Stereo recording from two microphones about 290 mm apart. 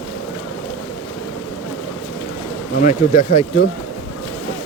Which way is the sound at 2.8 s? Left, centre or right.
Left.